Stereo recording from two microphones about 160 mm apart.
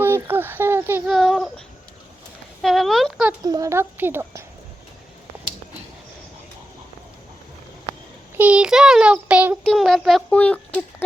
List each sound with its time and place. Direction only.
0.0 s a sound: 15° right (ahead or behind)
1.0 s child singing: centre (ahead or behind)
2.6 s a sound: centre (ahead or behind)
3.4 s child singing: 20° right (ahead or behind)
8.4 s child singing: 10° right (ahead or behind)
9.6 s speech: centre (ahead or behind)